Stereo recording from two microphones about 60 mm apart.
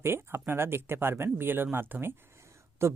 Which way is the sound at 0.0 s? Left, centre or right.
Right.